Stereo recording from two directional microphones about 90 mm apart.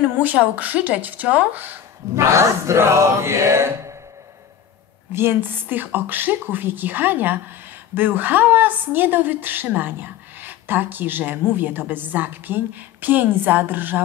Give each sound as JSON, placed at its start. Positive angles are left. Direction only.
{"t": 0.2, "sound": "a woman's voice", "side_deg": -20}
{"t": 2.1, "sound": "a sound", "side_deg": -30}
{"t": 5.1, "sound": "a woman's voice", "side_deg": -25}